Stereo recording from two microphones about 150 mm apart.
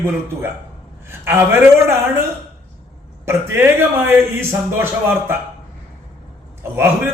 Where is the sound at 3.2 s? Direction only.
15° right (ahead or behind).